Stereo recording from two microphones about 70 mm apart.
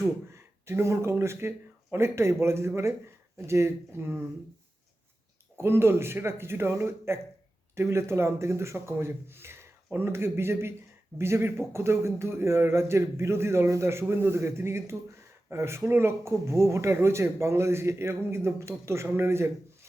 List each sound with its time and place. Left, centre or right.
0.3 s a man's voice: right
5.5 s a man's voice: right